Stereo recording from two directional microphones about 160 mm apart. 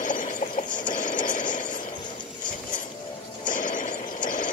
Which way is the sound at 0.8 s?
55° left (ahead or behind).